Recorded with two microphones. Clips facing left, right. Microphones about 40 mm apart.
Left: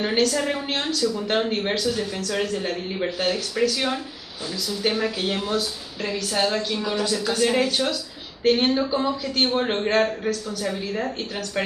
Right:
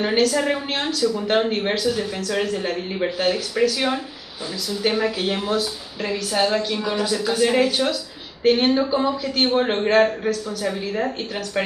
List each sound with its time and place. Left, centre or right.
0.0 s a woman's voice: centre